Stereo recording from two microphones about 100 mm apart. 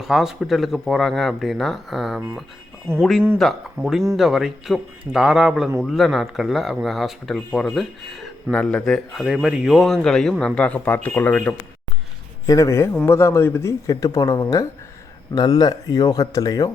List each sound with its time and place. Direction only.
0.0 s speech: 5° right (ahead or behind)
3.8 s speech: 30° right (ahead or behind)
4.2 s speech: 5° right (ahead or behind)
9.2 s speech: 5° right (ahead or behind); by 11.5 s 15° left (ahead or behind)
12.5 s speech: 30° left (ahead or behind)